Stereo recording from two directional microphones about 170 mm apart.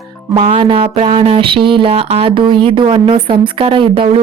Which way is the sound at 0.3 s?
30° right (ahead or behind).